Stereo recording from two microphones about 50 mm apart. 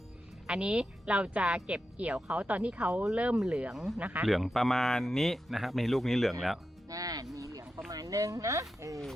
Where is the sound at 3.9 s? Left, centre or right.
Right.